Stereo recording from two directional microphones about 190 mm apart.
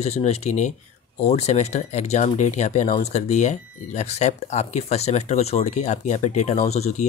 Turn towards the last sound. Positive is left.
turn(degrees=35)  # may be behind; listen again after turning